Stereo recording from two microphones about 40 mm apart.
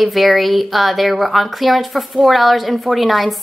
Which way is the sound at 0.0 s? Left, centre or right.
Centre.